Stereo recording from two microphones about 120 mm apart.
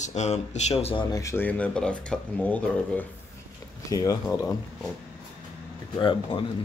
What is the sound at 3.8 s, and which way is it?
Speech, 30° left (ahead or behind).